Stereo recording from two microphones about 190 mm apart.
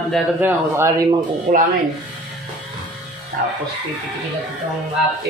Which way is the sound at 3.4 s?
50° right (ahead or behind).